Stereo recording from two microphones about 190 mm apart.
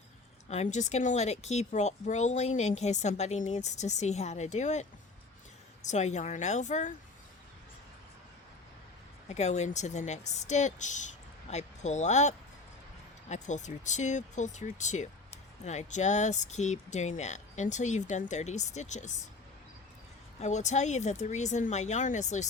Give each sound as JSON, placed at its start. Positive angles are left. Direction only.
{"t": 0.5, "sound": "speech", "side_deg": 35}
{"t": 9.3, "sound": "speech", "side_deg": 35}
{"t": 20.4, "sound": "speech", "side_deg": 40}